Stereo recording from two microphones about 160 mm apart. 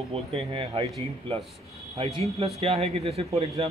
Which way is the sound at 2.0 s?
40° right (ahead or behind).